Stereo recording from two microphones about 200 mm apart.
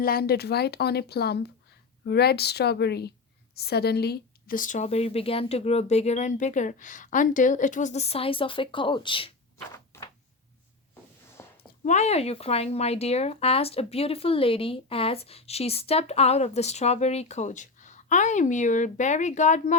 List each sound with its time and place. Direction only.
0.0 s speech: 50° left (ahead or behind); by 9.3 s 25° left (ahead or behind)
9.7 s door: 20° left (ahead or behind)
11.4 s a sound: 10° left (ahead or behind)
11.9 s speech: 35° left (ahead or behind)